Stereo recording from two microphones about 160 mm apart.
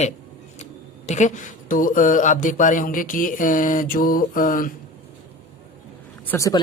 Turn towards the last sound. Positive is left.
turn(degrees=20)  # may be behind; listen again after turning